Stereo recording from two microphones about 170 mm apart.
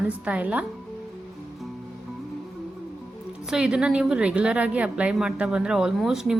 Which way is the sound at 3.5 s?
5° right (ahead or behind).